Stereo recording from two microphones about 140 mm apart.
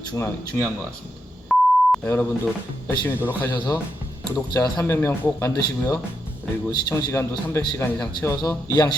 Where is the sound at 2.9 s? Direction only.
15° left (ahead or behind).